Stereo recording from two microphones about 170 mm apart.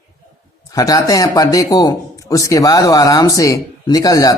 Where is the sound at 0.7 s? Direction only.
20° left (ahead or behind).